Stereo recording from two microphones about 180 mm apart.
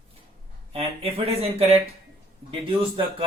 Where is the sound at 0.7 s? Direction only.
35° right (ahead or behind).